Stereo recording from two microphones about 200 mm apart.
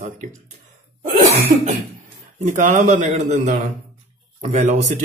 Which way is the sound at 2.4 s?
40° right (ahead or behind).